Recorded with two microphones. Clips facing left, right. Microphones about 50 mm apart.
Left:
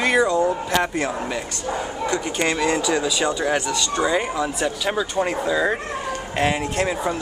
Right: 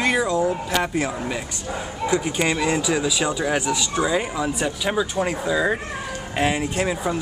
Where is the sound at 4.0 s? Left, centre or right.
Centre.